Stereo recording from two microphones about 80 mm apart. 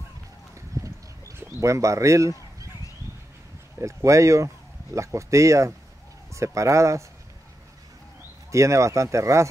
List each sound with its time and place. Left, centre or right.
0.6 s a sound: right
3.8 s speech: right
8.5 s speech: right